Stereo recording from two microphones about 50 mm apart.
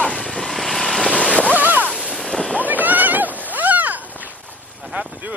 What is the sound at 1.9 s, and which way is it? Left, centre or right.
Ocean, centre.